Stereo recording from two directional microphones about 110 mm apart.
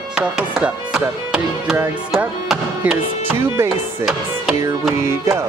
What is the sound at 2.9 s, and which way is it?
Speech, 20° right (ahead or behind).